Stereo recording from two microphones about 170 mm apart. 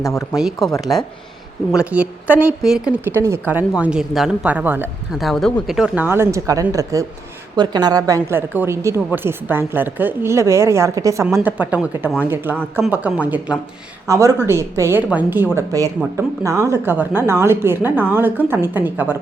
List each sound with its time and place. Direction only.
0.0 s speech: 15° left (ahead or behind)
0.3 s a woman's voice: centre (ahead or behind)
3.2 s a woman's voice: 15° right (ahead or behind)
5.2 s a woman's voice: centre (ahead or behind)